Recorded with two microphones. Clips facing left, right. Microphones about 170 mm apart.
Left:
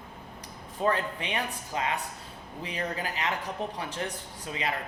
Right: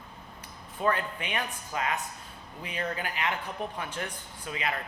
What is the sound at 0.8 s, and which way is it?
Speech, 30° left (ahead or behind).